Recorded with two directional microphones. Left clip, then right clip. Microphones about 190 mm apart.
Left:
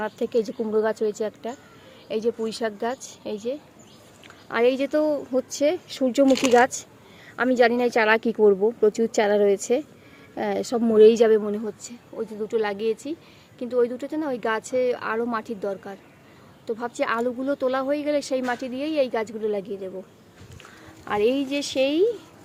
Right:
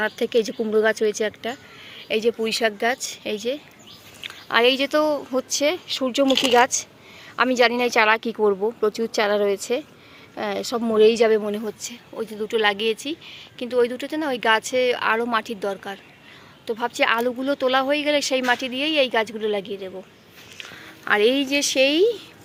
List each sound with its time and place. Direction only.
0.0 s speech: 5° right (ahead or behind); by 11.3 s 25° left (ahead or behind)
11.3 s speech: 5° left (ahead or behind)
21.0 s speech: centre (ahead or behind)